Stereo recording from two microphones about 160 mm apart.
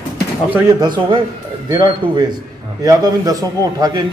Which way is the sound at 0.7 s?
25° right (ahead or behind).